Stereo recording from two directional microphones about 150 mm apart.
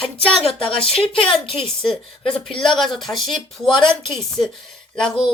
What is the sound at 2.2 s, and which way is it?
Speech, 35° left (ahead or behind).